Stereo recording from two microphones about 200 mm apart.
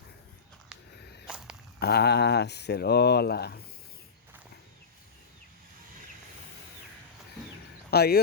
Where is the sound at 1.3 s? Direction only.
5° right (ahead or behind).